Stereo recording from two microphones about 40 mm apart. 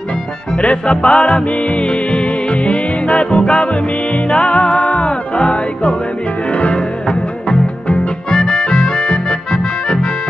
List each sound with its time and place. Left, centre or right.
0.6 s music: left
8.3 s accordion: centre